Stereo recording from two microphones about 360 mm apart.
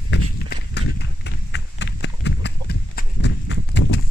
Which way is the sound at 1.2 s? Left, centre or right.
Left.